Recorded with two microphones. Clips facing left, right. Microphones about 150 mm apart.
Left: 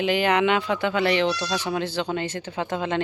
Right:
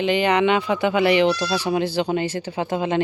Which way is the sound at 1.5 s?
10° right (ahead or behind).